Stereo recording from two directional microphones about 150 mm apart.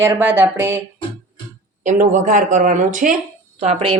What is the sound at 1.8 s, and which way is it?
Speech, 60° right (ahead or behind).